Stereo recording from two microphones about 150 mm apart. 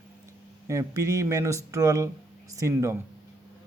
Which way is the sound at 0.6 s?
20° right (ahead or behind).